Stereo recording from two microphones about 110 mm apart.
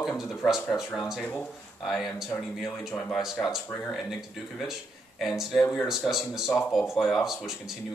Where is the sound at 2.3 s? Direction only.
20° left (ahead or behind).